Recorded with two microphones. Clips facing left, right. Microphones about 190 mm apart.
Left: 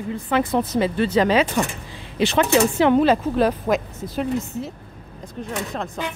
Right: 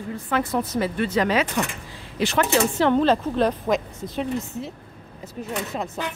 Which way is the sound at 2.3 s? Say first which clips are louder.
Left 3 dB; 15° left (ahead or behind).